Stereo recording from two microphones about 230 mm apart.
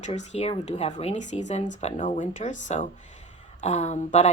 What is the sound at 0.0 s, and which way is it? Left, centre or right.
Speech, left.